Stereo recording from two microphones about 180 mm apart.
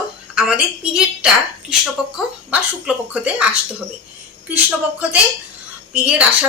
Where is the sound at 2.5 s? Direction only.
10° right (ahead or behind).